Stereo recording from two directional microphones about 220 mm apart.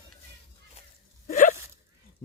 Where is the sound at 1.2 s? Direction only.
35° left (ahead or behind).